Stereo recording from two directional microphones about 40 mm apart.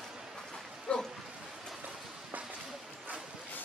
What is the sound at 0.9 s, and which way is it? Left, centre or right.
Dog, left.